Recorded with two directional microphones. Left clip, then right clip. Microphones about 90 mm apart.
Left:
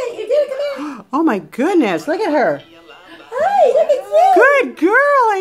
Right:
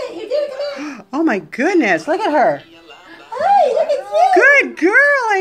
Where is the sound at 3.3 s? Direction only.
20° left (ahead or behind).